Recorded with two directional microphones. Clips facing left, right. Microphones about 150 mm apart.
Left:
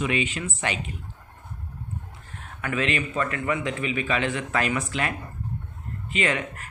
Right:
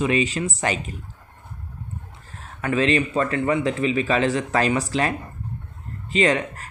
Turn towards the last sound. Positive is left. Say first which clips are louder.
# right 6 dB
turn(degrees=-35)  # may be behind; listen again after turning